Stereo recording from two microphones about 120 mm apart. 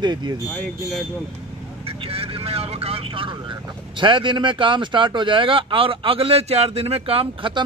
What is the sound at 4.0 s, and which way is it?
Speech, 45° right (ahead or behind).